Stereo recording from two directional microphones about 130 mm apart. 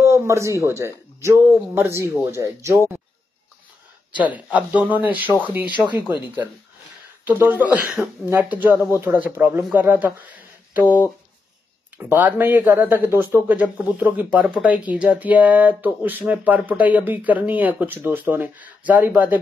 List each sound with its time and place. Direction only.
0.0 s speech: 20° right (ahead or behind)
4.2 s speech: 10° right (ahead or behind)
12.0 s speech: 15° right (ahead or behind)